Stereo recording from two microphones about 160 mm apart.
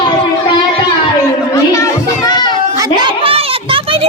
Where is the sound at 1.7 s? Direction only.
25° left (ahead or behind).